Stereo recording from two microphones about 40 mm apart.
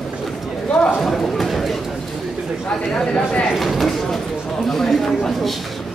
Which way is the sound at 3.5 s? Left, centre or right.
Centre.